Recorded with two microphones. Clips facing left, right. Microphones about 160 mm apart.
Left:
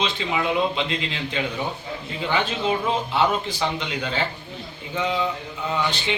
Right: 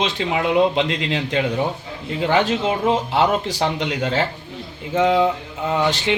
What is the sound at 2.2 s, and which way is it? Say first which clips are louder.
A man's voice: right 6 dB; 85° right.